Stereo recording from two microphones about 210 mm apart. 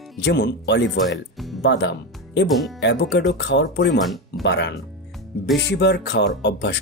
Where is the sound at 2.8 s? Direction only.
55° left (ahead or behind).